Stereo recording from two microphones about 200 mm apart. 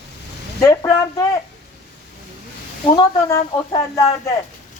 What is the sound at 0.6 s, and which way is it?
Speech, 15° left (ahead or behind).